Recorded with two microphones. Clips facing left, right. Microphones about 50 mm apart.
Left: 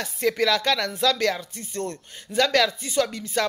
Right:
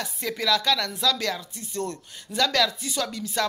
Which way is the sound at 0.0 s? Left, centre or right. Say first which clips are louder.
Left 6 dB; left.